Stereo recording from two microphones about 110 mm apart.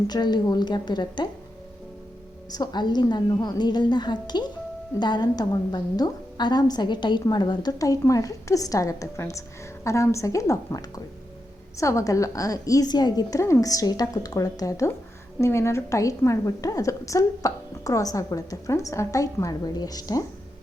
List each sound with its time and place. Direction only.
0.1 s a woman's voice: 40° left (ahead or behind)
2.5 s a woman's voice: 40° left (ahead or behind)